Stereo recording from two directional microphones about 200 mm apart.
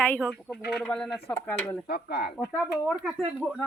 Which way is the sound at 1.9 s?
50° left (ahead or behind).